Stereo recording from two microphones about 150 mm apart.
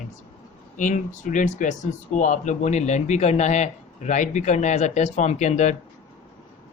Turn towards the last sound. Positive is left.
turn(degrees=50)  # may be behind; listen again after turning